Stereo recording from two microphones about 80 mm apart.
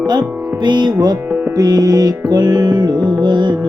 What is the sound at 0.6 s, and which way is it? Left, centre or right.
Music, right.